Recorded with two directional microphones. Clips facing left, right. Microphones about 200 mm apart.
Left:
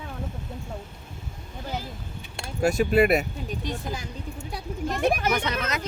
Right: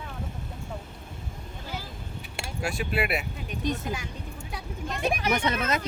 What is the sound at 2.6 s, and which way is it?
Speech, 45° left (ahead or behind).